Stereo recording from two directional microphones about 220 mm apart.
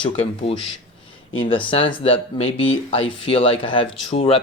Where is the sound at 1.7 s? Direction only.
25° left (ahead or behind).